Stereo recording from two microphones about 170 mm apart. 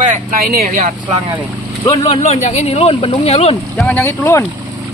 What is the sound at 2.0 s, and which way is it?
Speech, 40° left (ahead or behind).